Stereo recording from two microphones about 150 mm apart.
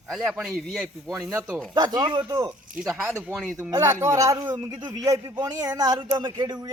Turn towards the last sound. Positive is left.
turn(degrees=-30)  # may be behind; listen again after turning